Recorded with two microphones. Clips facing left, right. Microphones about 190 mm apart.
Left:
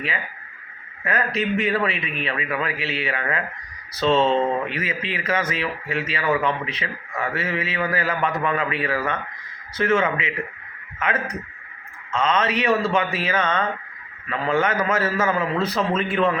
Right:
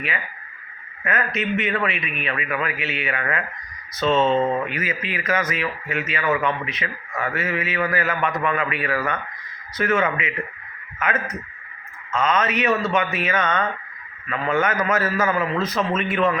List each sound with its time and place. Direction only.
1.0 s a man's voice: 35° left (ahead or behind)